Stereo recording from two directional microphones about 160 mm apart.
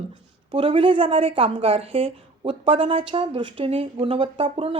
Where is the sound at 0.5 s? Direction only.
35° right (ahead or behind).